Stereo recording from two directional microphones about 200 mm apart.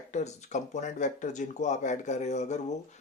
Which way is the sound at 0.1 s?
35° left (ahead or behind).